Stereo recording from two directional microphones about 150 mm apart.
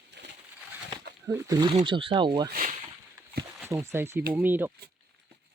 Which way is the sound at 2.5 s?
60° right (ahead or behind).